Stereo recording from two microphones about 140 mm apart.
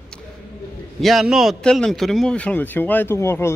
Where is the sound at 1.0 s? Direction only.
Centre (ahead or behind).